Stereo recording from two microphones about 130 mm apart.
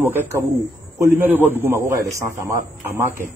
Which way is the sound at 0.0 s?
20° right (ahead or behind).